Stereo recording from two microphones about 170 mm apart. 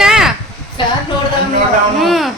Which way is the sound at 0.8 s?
25° left (ahead or behind).